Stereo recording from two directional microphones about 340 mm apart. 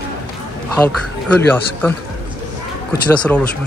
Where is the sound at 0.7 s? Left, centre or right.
Centre.